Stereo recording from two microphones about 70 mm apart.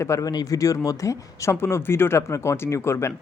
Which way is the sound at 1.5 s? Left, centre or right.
Left.